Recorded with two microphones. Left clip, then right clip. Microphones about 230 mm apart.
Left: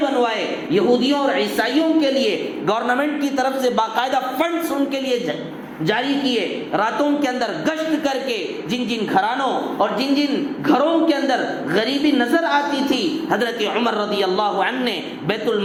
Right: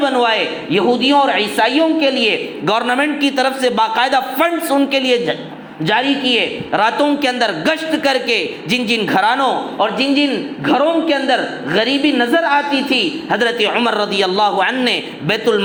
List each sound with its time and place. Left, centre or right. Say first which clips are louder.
0.0 s a woman's voice: right 5 dB; right